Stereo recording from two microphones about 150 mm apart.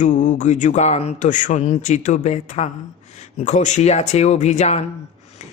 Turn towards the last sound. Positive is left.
turn(degrees=50)  # may be behind; listen again after turning